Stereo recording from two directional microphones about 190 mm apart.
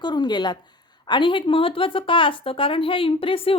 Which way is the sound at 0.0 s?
25° left (ahead or behind).